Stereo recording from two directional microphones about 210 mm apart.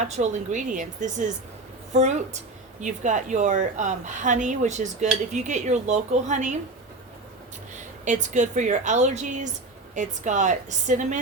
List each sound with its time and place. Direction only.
0.2 s a woman's voice: 35° right (ahead or behind)
8.0 s a woman's voice: 35° right (ahead or behind)